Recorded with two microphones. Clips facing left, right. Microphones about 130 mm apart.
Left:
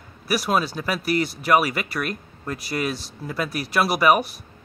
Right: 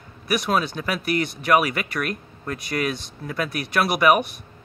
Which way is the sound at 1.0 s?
30° left (ahead or behind).